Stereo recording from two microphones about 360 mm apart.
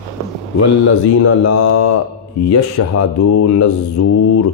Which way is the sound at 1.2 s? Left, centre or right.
Left.